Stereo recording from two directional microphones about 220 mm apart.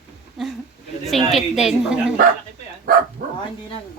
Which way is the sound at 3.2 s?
40° right (ahead or behind).